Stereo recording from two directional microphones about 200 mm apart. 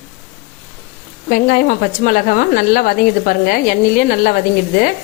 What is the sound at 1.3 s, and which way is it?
A woman's voice, 45° left (ahead or behind).